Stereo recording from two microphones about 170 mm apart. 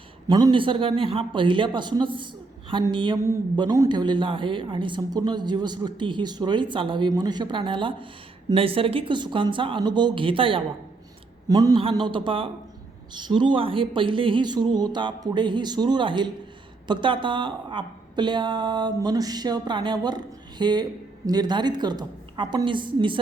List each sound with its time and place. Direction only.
0.3 s a man's voice: 25° right (ahead or behind)